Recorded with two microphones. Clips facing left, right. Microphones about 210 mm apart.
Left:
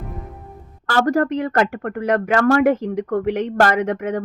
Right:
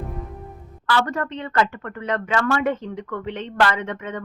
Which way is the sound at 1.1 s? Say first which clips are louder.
Left 9 dB; 75° left (ahead or behind).